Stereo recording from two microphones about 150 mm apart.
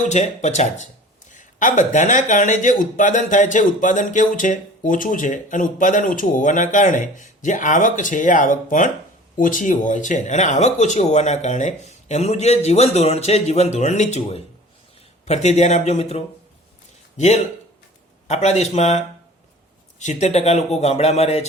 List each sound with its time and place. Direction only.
0.1 s speech: 50° left (ahead or behind)